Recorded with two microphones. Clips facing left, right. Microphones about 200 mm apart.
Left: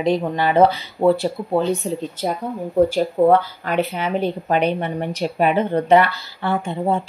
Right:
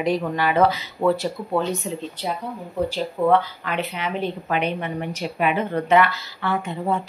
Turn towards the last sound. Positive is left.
turn(degrees=30)  # may be behind; listen again after turning